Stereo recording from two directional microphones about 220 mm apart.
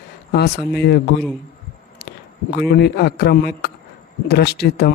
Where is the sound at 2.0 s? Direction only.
50° left (ahead or behind).